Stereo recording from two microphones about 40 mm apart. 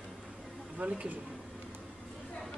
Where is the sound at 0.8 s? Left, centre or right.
Right.